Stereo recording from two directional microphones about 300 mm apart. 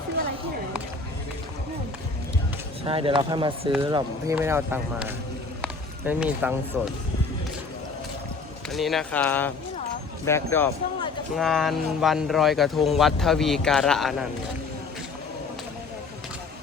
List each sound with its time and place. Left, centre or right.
2.8 s speech: centre
5.6 s run: centre
8.7 s speech: centre